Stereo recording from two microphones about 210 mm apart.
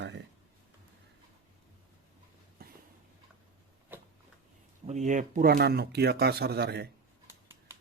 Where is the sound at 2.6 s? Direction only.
50° right (ahead or behind).